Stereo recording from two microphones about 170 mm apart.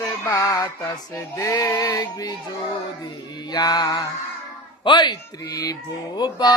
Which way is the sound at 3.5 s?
25° left (ahead or behind).